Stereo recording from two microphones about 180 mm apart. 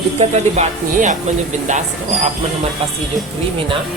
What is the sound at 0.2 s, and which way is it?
Speech, 40° right (ahead or behind).